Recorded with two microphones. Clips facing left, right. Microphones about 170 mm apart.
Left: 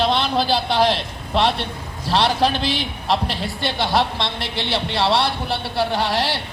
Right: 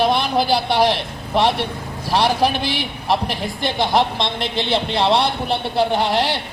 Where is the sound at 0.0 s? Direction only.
15° right (ahead or behind).